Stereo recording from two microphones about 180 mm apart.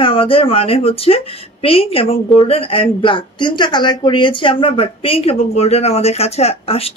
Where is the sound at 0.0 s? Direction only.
30° left (ahead or behind).